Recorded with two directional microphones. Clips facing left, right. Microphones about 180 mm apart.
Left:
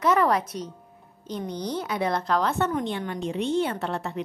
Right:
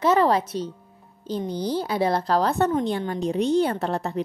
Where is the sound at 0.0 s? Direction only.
30° right (ahead or behind).